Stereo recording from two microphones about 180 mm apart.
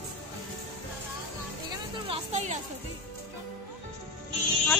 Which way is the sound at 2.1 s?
40° right (ahead or behind).